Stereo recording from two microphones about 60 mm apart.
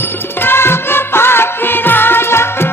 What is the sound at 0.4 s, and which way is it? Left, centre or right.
Music, left.